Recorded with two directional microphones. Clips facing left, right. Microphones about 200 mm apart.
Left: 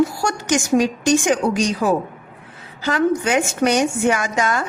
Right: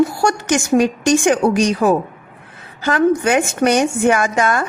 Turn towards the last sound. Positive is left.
turn(degrees=-55)  # may be behind; listen again after turning